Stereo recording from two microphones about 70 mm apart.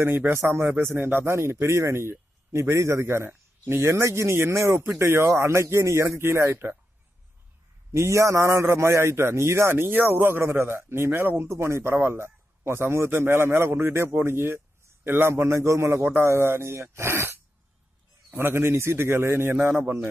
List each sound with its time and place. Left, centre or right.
0.0 s a man's voice: right
6.5 s speech: right
7.9 s a man's voice: right